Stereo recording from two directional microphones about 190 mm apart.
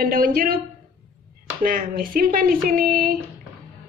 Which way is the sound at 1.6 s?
50° right (ahead or behind).